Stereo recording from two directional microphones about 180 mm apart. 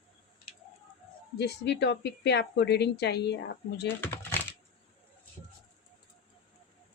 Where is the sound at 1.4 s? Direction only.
70° left (ahead or behind).